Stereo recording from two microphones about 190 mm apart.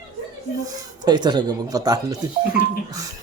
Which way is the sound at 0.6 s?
20° right (ahead or behind).